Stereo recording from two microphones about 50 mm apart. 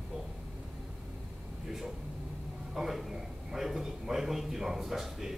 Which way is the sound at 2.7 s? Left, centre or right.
Centre.